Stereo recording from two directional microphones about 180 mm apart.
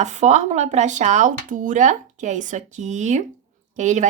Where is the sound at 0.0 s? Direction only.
40° right (ahead or behind).